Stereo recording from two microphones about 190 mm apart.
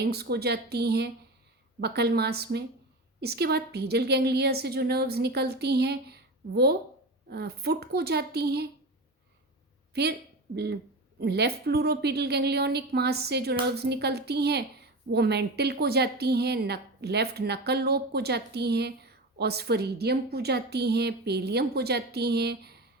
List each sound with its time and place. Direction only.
0.0 s speech: 55° right (ahead or behind)
9.9 s speech: 60° right (ahead or behind)